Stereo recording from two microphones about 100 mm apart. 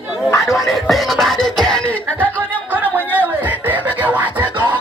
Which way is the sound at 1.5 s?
5° left (ahead or behind).